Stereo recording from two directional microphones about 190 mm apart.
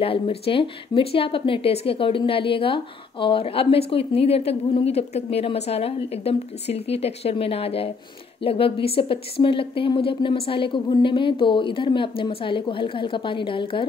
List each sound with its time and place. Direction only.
0.0 s a woman's voice: 30° left (ahead or behind)